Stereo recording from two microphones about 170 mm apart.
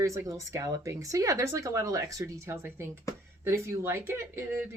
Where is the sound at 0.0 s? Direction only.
20° right (ahead or behind).